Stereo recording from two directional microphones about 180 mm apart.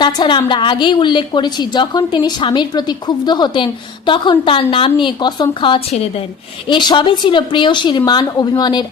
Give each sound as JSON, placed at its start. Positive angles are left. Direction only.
{"t": 0.0, "sound": "a woman's voice", "side_deg": 25}